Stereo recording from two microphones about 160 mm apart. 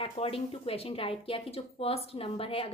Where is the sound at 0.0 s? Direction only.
35° left (ahead or behind).